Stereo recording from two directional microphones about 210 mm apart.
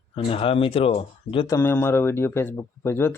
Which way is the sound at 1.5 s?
10° left (ahead or behind).